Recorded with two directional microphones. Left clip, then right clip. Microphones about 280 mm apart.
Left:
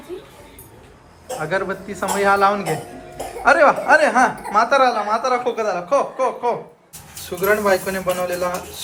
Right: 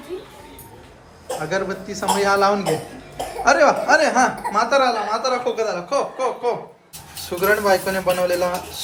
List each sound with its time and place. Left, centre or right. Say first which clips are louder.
1.4 s speech: left 2 dB; centre